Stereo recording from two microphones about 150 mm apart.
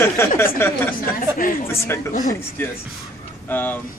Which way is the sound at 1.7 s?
15° left (ahead or behind).